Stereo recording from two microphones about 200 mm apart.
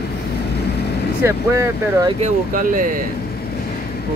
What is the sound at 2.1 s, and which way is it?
Speech, 40° right (ahead or behind).